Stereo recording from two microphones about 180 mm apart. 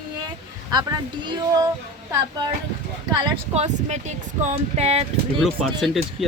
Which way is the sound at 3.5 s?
40° right (ahead or behind).